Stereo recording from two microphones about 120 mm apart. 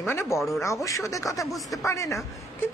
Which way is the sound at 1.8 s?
25° left (ahead or behind).